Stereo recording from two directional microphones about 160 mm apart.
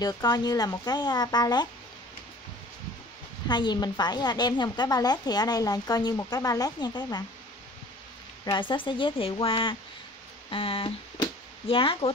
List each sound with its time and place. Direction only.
0.0 s a woman's voice: 25° left (ahead or behind)
3.4 s a woman's voice: 25° left (ahead or behind)
8.5 s speech: 30° left (ahead or behind)